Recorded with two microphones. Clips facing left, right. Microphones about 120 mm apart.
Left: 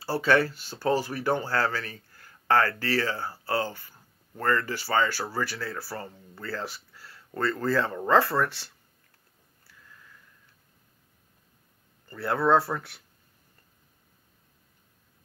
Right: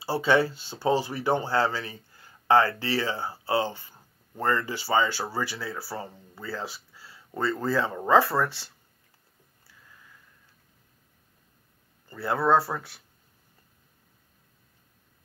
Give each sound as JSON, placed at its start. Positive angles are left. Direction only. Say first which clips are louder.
{"t": 0.0, "sound": "speech", "louder": "right 1 dB", "side_deg": -15}
{"t": 12.1, "sound": "speech", "louder": "even", "side_deg": -5}